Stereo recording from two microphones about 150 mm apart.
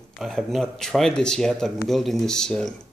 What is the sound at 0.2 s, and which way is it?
Speech, centre (ahead or behind).